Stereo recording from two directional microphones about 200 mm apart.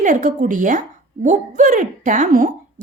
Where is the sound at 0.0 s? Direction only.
40° right (ahead or behind).